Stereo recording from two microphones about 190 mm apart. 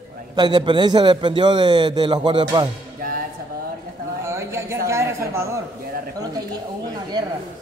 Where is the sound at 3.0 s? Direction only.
50° right (ahead or behind).